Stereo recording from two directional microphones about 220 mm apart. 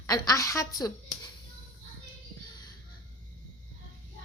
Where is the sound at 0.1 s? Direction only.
15° left (ahead or behind).